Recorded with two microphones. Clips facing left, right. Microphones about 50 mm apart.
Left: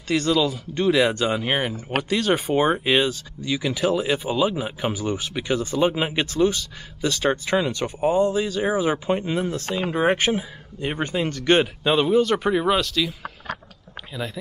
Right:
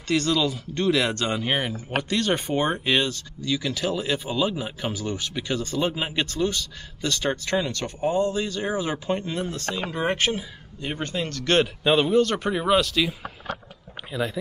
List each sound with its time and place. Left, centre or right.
0.1 s speech: centre
11.6 s speech: centre
14.1 s speech: centre